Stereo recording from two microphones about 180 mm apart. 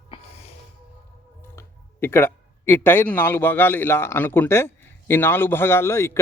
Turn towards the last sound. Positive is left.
turn(degrees=15)  # may be behind; listen again after turning